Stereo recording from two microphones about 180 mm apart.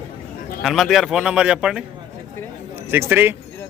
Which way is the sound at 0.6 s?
Centre (ahead or behind).